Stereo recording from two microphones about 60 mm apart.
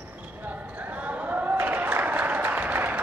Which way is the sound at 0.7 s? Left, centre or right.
Right.